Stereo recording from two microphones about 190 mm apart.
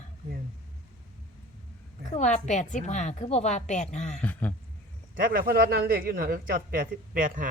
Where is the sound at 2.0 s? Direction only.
40° left (ahead or behind).